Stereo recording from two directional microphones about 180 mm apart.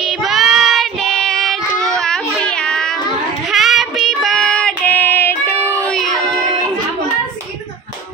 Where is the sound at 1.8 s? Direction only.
5° left (ahead or behind).